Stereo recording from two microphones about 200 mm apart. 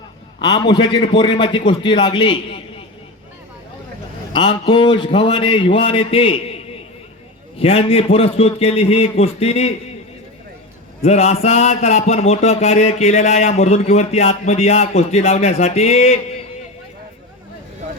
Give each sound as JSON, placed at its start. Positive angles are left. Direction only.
{"t": 0.4, "sound": "a man's voice", "side_deg": 20}
{"t": 4.3, "sound": "a man's voice", "side_deg": 25}
{"t": 7.6, "sound": "a man's voice", "side_deg": 30}
{"t": 11.0, "sound": "a man's voice", "side_deg": 35}